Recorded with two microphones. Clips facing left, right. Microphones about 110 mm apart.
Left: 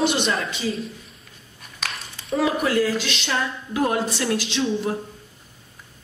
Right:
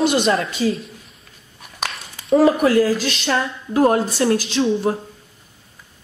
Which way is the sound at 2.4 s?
40° right (ahead or behind).